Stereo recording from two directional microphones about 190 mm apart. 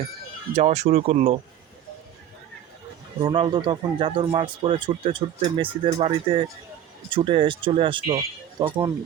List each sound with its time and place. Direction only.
0.5 s speech: 35° right (ahead or behind)
3.2 s speech: 25° right (ahead or behind)